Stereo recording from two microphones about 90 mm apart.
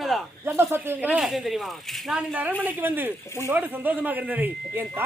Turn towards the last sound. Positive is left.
turn(degrees=-20)  # may be behind; listen again after turning